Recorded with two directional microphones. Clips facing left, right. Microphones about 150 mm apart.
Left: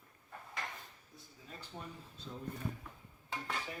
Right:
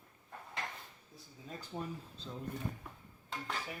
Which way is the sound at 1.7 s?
20° right (ahead or behind).